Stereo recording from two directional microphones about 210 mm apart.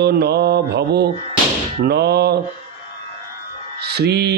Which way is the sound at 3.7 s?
50° right (ahead or behind).